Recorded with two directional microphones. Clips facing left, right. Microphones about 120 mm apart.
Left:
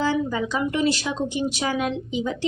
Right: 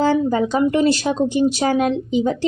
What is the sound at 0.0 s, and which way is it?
A woman's voice, 45° right (ahead or behind).